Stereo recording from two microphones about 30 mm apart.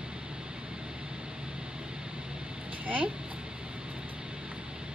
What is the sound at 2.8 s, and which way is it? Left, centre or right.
Speech, right.